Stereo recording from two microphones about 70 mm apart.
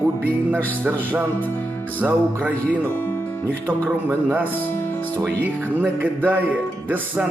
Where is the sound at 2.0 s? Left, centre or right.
Right.